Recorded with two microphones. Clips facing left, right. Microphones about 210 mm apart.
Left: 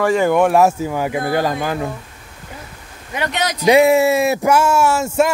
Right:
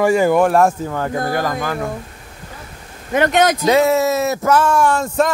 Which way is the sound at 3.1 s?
50° right (ahead or behind).